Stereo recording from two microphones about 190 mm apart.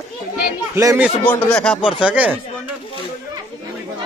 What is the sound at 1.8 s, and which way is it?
Speech, 5° right (ahead or behind).